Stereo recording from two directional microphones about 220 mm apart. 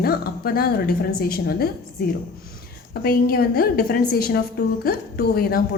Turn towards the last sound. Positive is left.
turn(degrees=45)  # may be behind; listen again after turning